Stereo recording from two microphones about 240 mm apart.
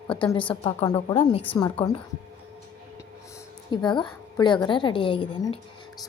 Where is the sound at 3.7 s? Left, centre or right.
Centre.